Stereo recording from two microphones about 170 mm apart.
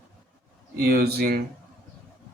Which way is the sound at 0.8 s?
65° right (ahead or behind).